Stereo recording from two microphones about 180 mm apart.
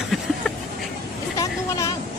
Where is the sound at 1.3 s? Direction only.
20° left (ahead or behind).